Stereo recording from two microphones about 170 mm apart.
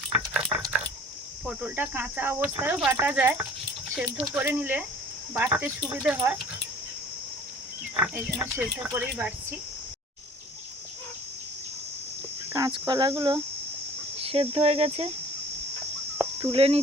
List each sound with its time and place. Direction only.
0.1 s a sound: 5° right (ahead or behind)
1.5 s speech: 10° right (ahead or behind)
8.1 s speech: 15° right (ahead or behind)
12.5 s speech: 20° right (ahead or behind)
14.2 s cricket: 35° right (ahead or behind)
16.5 s speech: 35° right (ahead or behind)